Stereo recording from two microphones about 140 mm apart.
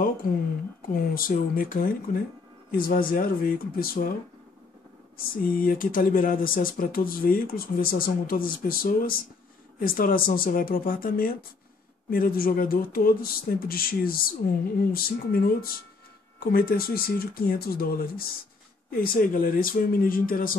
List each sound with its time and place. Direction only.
0.8 s speech: 90° left
5.1 s speech: 90° left